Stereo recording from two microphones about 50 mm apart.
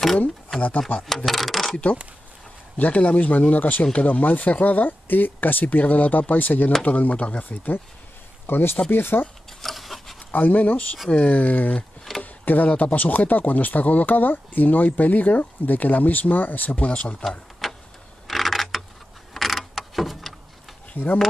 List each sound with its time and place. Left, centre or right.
0.6 s speech: left
1.0 s speech: centre
2.8 s speech: left
7.4 s speech: left
9.5 s rub: centre
10.3 s speech: left
16.7 s speech: left
17.6 s vehicle: centre
18.2 s a sound: centre